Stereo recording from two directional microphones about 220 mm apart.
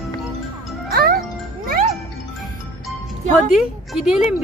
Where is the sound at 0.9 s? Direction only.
45° right (ahead or behind).